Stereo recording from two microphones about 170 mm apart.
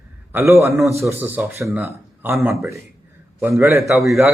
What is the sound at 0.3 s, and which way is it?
A man's voice, 15° right (ahead or behind).